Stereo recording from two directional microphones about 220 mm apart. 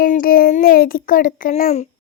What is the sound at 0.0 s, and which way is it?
A child's voice, 40° left (ahead or behind).